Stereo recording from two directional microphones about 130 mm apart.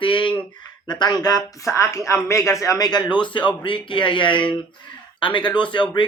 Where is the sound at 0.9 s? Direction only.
30° left (ahead or behind).